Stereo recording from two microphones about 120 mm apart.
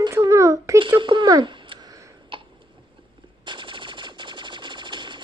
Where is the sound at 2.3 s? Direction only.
40° right (ahead or behind).